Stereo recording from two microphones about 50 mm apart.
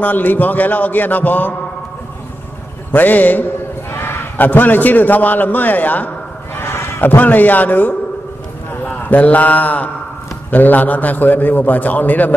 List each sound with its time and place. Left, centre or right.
0.0 s a man's voice: left
2.9 s a man's voice: left
3.9 s a man's voice: left
6.6 s speech: left
8.9 s mantra: left
10.5 s a man's voice: left